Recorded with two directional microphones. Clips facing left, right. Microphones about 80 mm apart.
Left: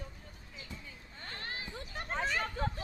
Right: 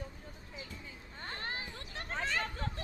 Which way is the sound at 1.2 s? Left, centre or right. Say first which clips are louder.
Right 2 dB; right.